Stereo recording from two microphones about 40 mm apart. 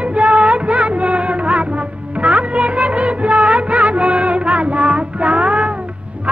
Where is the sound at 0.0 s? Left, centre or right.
Right.